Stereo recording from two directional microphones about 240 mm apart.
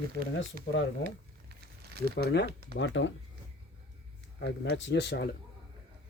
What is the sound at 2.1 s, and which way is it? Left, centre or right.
Speech, left.